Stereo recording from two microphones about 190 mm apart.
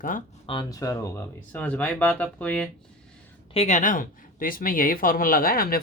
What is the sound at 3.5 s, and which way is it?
Speech, 35° left (ahead or behind).